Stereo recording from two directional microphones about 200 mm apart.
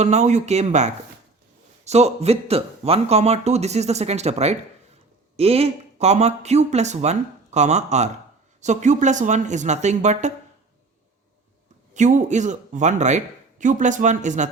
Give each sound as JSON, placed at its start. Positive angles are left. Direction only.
{"t": 0.0, "sound": "speech", "side_deg": -35}
{"t": 11.9, "sound": "speech", "side_deg": -35}